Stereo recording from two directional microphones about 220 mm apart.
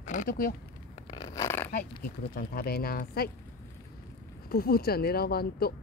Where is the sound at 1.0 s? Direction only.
15° left (ahead or behind).